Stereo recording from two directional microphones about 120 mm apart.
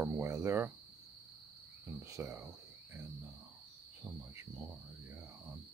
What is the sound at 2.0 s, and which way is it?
Speech, 25° right (ahead or behind).